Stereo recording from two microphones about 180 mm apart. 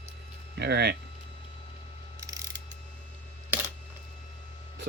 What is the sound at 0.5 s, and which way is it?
Speech, 65° right (ahead or behind).